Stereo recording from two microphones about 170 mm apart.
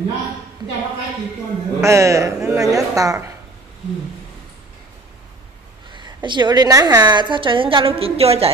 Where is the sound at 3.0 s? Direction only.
20° right (ahead or behind).